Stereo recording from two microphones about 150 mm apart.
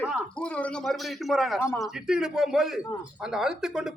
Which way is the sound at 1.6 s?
20° left (ahead or behind).